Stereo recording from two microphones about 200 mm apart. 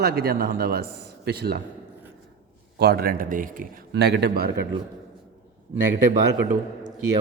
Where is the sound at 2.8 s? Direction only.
50° right (ahead or behind).